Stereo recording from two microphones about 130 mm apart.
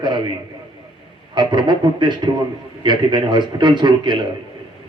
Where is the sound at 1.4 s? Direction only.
35° right (ahead or behind).